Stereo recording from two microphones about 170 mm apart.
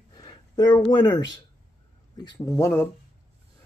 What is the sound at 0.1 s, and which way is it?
Speech, 25° left (ahead or behind).